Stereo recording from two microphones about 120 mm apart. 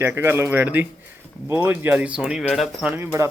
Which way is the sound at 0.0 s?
20° right (ahead or behind).